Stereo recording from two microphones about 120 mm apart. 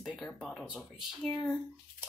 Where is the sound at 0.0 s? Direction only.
Centre (ahead or behind).